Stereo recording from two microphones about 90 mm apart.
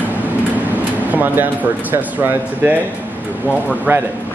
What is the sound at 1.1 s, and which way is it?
Speech, 20° right (ahead or behind).